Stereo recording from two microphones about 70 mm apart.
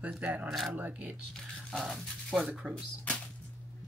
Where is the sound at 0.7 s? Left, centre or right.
Right.